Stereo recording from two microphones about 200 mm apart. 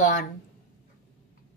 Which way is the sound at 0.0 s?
40° left (ahead or behind).